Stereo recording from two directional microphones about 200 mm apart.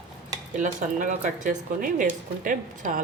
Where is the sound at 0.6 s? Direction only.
40° right (ahead or behind).